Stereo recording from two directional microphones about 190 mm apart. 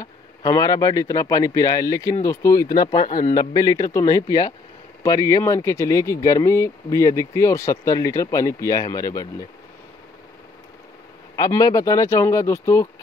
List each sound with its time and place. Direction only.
0.0 s speech: 20° left (ahead or behind)
3.1 s a man's voice: 45° left (ahead or behind)
3.3 s speech: 20° left (ahead or behind)
11.3 s speech: 20° left (ahead or behind)